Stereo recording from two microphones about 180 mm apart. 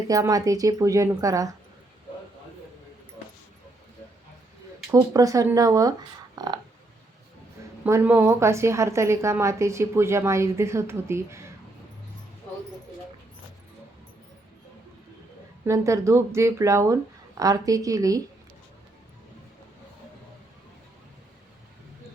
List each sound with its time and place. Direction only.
0.1 s speech: 20° right (ahead or behind)
4.9 s speech: 20° right (ahead or behind)
6.3 s a sound: 25° right (ahead or behind)
7.9 s a woman's voice: 15° right (ahead or behind)
15.6 s a woman's voice: 15° right (ahead or behind)